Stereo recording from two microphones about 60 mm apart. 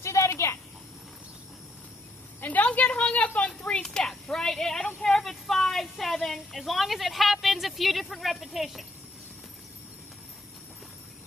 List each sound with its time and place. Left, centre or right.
0.0 s a sound: left
2.4 s a woman's voice: left
5.2 s a woman's voice: centre